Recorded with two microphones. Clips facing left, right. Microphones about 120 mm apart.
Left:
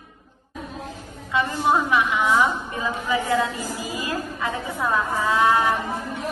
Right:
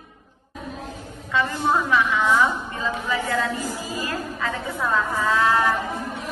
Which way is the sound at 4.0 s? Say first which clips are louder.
Left 2 dB; 15° left (ahead or behind).